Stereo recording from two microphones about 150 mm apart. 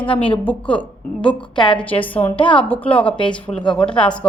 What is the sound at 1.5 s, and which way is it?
A woman's voice, 30° left (ahead or behind).